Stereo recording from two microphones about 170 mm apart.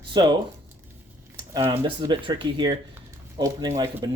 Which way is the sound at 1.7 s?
30° right (ahead or behind).